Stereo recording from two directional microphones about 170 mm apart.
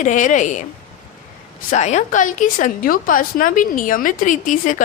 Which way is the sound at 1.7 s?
45° left (ahead or behind).